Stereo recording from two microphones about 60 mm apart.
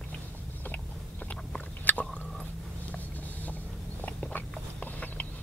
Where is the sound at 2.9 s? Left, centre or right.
Left.